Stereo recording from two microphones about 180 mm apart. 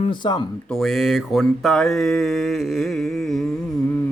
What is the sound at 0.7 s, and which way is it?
Mantra, centre (ahead or behind).